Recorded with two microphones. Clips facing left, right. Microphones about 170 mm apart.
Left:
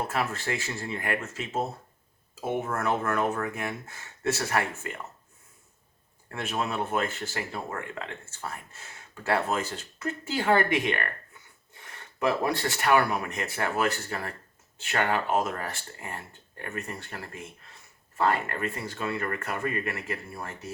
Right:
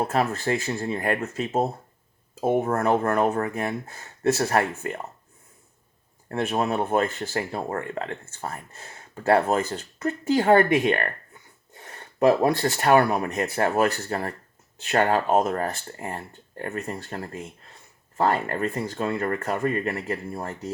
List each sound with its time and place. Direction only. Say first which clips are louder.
0.1 s speech: right 6 dB; 40° right (ahead or behind)
6.2 s speech: right 7 dB; 35° right (ahead or behind)